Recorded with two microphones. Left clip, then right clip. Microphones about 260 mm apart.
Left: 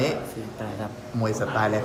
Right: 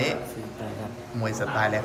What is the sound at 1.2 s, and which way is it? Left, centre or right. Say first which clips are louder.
Speech: left 1 dB; centre.